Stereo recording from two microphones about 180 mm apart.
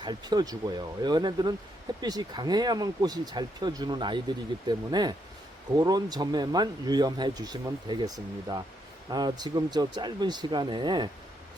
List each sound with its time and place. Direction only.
0.0 s speech: 25° right (ahead or behind)